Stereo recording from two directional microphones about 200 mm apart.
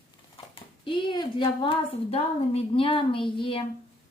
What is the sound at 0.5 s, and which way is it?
Speech, 25° left (ahead or behind).